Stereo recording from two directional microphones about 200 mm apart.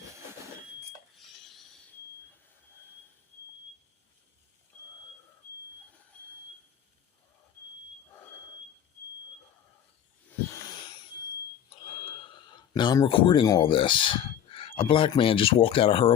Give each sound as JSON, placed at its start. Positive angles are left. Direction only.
{"t": 1.1, "sound": "a sound", "side_deg": 0}
{"t": 10.2, "sound": "wheeze", "side_deg": 15}
{"t": 11.7, "sound": "speech", "side_deg": 25}